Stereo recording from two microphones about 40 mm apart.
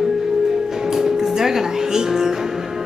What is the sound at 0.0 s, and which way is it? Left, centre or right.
A woman's voice, centre.